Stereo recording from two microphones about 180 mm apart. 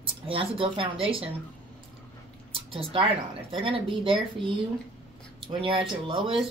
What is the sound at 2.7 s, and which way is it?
Speech, 30° right (ahead or behind).